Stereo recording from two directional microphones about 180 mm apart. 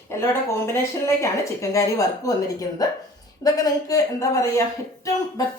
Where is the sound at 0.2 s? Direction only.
15° left (ahead or behind).